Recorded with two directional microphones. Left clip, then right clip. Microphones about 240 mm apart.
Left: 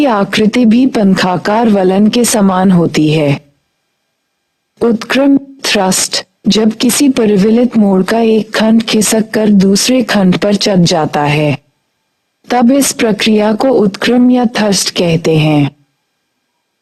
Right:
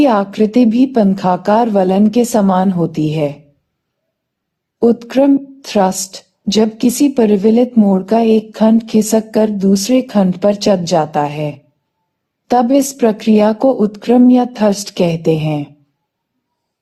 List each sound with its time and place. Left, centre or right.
0.0 s speech: left
4.9 s speech: left